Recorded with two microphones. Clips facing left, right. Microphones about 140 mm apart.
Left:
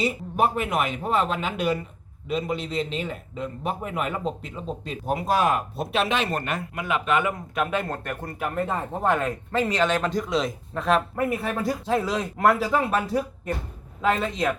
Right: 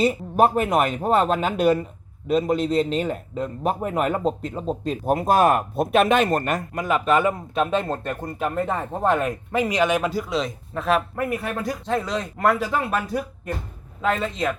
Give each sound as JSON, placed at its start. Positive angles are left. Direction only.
{"t": 0.0, "sound": "a man's voice", "side_deg": -40}
{"t": 12.9, "sound": "speech", "side_deg": 25}
{"t": 14.0, "sound": "speech", "side_deg": 0}